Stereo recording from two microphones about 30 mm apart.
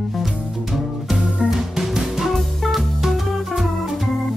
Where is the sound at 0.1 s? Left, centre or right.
Centre.